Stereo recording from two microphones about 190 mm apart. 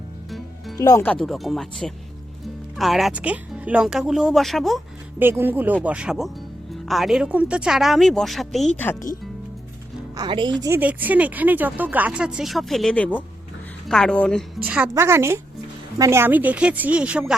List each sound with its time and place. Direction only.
0.3 s music: centre (ahead or behind)
0.8 s speech: 15° left (ahead or behind); by 4.8 s centre (ahead or behind)
5.2 s speech: 10° right (ahead or behind); by 9.0 s 10° left (ahead or behind)
10.2 s speech: 25° right (ahead or behind)
10.6 s speech: 10° right (ahead or behind)